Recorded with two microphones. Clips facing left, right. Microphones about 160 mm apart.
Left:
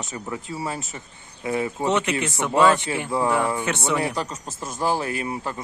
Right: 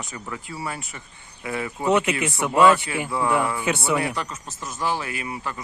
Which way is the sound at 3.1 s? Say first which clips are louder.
Left 1 dB; 35° left (ahead or behind).